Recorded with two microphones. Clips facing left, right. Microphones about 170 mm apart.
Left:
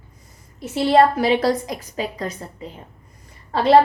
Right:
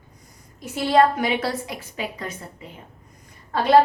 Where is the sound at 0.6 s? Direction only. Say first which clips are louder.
Left 3 dB; 30° left (ahead or behind).